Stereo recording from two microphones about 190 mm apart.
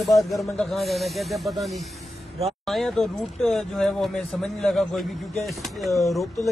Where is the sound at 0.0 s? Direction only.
Centre (ahead or behind).